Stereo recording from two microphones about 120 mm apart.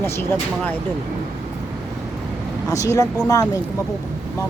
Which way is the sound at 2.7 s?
30° left (ahead or behind).